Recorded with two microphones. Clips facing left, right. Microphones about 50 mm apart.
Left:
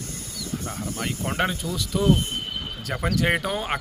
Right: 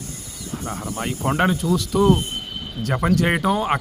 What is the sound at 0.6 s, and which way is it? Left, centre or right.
Speech, right.